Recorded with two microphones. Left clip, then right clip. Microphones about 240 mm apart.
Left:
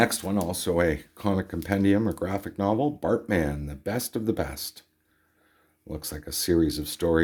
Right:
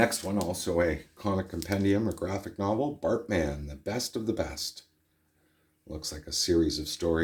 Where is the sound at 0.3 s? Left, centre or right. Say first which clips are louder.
Left 3 dB; left.